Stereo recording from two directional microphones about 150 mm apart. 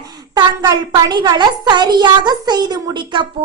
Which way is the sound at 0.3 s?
25° right (ahead or behind).